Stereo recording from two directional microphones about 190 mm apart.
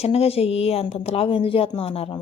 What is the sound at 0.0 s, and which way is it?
Speech, 30° left (ahead or behind).